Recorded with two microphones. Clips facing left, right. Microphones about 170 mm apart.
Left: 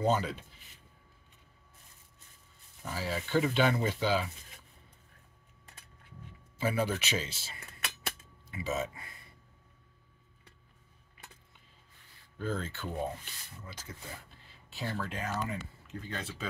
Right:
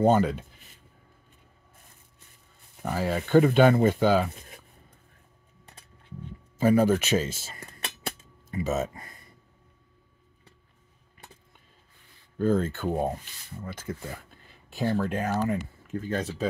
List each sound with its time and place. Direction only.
0.0 s speech: 50° right (ahead or behind)
2.8 s speech: 55° right (ahead or behind)
6.6 s speech: 45° right (ahead or behind)
12.4 s speech: 50° right (ahead or behind)